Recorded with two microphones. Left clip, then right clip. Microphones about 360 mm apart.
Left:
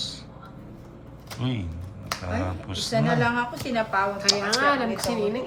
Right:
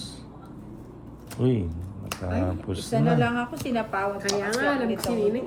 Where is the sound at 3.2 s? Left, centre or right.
Left.